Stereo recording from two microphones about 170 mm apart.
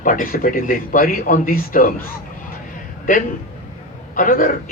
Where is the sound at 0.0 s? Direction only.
55° left (ahead or behind).